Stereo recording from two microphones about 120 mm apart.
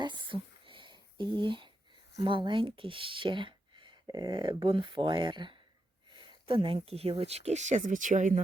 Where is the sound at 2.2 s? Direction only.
45° right (ahead or behind).